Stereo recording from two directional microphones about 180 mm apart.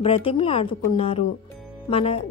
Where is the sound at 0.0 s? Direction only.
30° left (ahead or behind).